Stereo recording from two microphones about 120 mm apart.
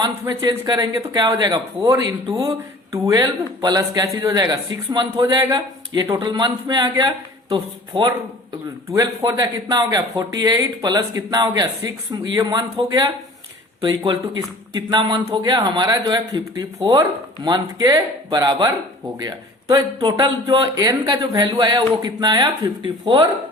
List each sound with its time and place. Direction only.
0.0 s speech: 30° right (ahead or behind)
19.7 s speech: 40° right (ahead or behind)